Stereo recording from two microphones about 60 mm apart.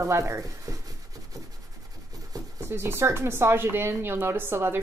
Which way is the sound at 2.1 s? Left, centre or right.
Right.